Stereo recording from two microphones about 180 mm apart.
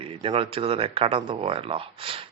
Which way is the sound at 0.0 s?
30° right (ahead or behind).